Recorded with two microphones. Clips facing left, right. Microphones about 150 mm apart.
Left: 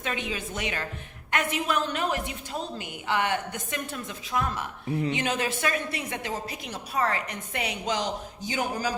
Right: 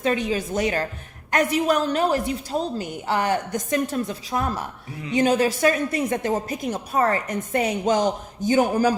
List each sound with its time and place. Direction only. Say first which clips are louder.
0.0 s a woman's voice: right 9 dB; 40° right (ahead or behind)